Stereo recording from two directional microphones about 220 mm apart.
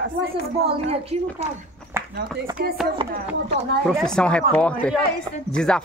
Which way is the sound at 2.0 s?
10° right (ahead or behind).